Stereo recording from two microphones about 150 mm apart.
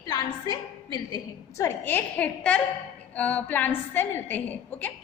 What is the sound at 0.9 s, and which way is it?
A woman's voice, 25° left (ahead or behind).